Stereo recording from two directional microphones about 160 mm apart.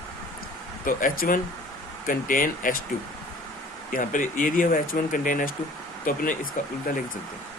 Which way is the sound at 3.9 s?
55° left (ahead or behind).